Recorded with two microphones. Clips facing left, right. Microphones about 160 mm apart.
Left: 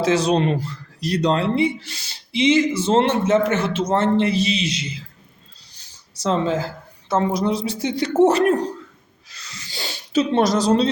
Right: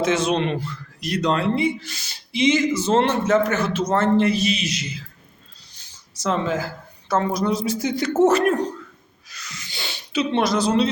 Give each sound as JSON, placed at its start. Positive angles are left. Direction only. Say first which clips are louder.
{"t": 0.0, "sound": "speech", "louder": "left 2 dB", "side_deg": 35}
{"t": 6.2, "sound": "speech", "louder": "left 2 dB", "side_deg": 30}
{"t": 9.3, "sound": "a sound", "louder": "left 1 dB", "side_deg": 30}